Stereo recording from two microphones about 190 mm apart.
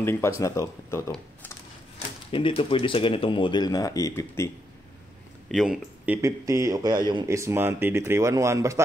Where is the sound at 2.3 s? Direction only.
25° left (ahead or behind).